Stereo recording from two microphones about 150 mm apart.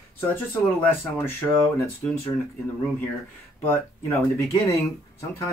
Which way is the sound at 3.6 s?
15° left (ahead or behind).